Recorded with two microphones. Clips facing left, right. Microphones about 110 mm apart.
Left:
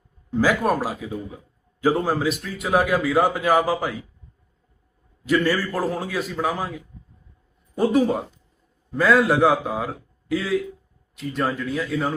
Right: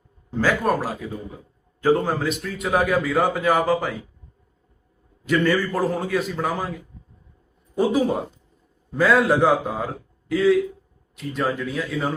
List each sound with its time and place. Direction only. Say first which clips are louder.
0.3 s speech: left 1 dB; 10° left (ahead or behind)
5.2 s speech: right 1 dB; centre (ahead or behind)
7.8 s speech: left 1 dB; centre (ahead or behind)